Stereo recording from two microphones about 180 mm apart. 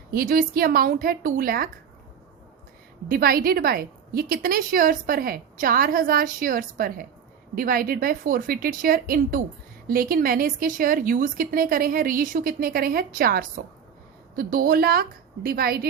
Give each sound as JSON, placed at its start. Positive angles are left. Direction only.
{"t": 0.1, "sound": "a woman's voice", "side_deg": -55}
{"t": 3.1, "sound": "a woman's voice", "side_deg": -55}